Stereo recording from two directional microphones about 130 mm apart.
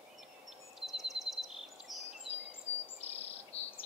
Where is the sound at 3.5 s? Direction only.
55° left (ahead or behind).